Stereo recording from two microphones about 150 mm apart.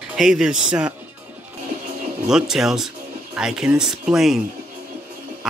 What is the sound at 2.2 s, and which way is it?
Speech, 5° right (ahead or behind).